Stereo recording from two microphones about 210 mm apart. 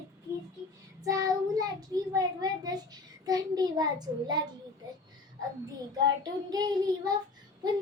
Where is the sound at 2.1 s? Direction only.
20° right (ahead or behind).